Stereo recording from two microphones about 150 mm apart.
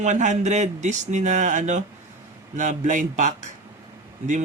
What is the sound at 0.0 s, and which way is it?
Speech, 55° right (ahead or behind).